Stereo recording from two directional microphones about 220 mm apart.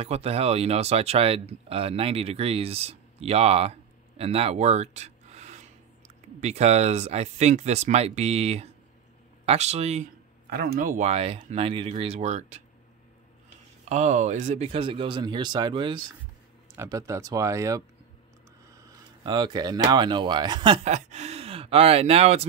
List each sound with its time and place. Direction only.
0.0 s speech: 25° right (ahead or behind)
10.5 s speech: 40° right (ahead or behind)
13.8 s speech: 30° right (ahead or behind)